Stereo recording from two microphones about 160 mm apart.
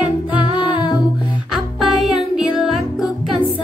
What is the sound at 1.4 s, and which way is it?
Music, centre (ahead or behind).